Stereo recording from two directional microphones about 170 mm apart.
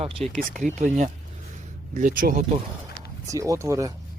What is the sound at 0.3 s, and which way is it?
Speech, 50° right (ahead or behind).